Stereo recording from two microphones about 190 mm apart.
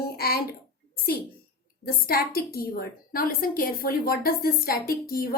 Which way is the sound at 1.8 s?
50° left (ahead or behind).